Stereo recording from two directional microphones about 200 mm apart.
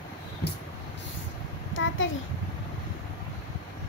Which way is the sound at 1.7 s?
75° left (ahead or behind).